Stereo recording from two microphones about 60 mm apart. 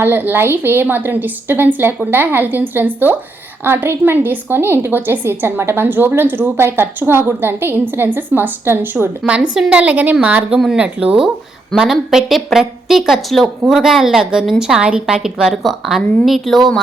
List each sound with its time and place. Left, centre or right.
0.0 s a woman's voice: right
9.6 s a woman's voice: right
10.8 s a woman's voice: centre
15.6 s a woman's voice: centre